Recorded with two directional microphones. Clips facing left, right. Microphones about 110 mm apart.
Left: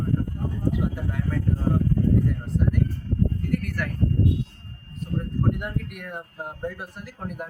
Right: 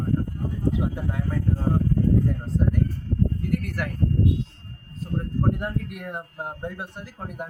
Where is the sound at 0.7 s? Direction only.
25° right (ahead or behind).